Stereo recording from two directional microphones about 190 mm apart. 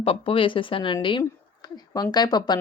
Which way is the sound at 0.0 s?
30° left (ahead or behind).